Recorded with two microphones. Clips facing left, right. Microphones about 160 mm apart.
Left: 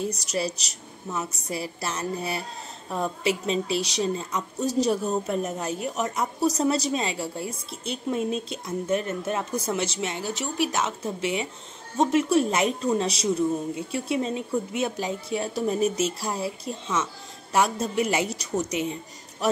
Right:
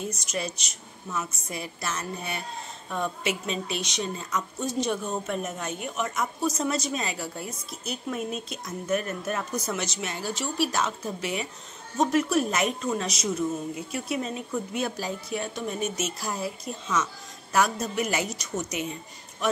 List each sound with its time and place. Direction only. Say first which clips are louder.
0.0 s a woman's voice: left 4 dB; 35° left (ahead or behind)